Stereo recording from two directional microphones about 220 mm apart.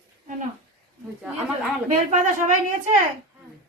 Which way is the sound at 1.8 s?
35° right (ahead or behind).